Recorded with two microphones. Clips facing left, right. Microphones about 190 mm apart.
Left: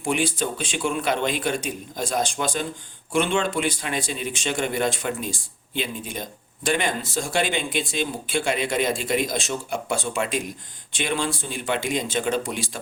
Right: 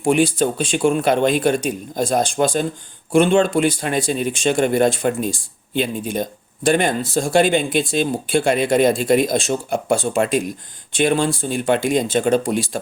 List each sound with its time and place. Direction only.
0.0 s speech: 45° right (ahead or behind)